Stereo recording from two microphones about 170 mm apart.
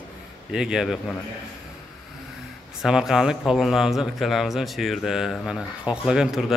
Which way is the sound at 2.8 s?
Centre (ahead or behind).